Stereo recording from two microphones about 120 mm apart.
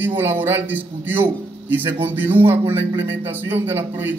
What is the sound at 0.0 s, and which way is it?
A man's voice, 15° right (ahead or behind).